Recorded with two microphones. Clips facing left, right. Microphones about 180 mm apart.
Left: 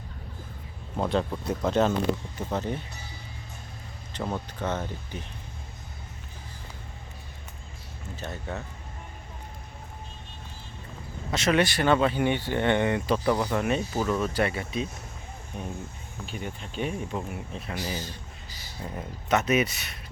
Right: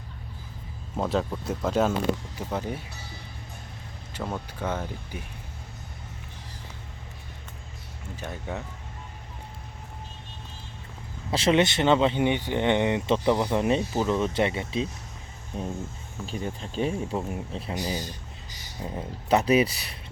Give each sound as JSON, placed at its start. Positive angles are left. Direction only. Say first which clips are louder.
{"t": 0.9, "sound": "speech", "louder": "even", "side_deg": 0}
{"t": 4.2, "sound": "speech", "louder": "left 1 dB", "side_deg": 5}
{"t": 4.6, "sound": "speech", "louder": "right 1 dB", "side_deg": -10}
{"t": 8.1, "sound": "speech", "louder": "right 1 dB", "side_deg": -10}
{"t": 11.3, "sound": "speech", "louder": "right 2 dB", "side_deg": -30}
{"t": 17.7, "sound": "speech", "louder": "right 2 dB", "side_deg": -15}
{"t": 18.5, "sound": "a sound", "louder": "right 2 dB", "side_deg": -20}
{"t": 19.3, "sound": "speech", "louder": "right 3 dB", "side_deg": -30}